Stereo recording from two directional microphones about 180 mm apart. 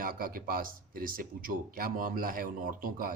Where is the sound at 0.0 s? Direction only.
50° right (ahead or behind).